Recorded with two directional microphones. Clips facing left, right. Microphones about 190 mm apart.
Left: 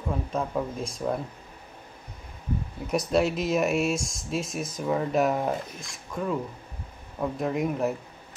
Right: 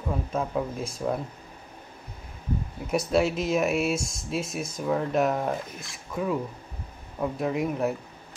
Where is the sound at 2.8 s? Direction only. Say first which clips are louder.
Even; centre (ahead or behind).